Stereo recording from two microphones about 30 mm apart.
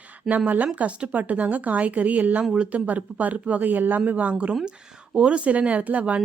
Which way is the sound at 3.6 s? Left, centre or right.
Right.